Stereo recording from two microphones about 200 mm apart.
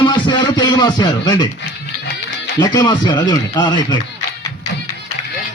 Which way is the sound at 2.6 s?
20° left (ahead or behind).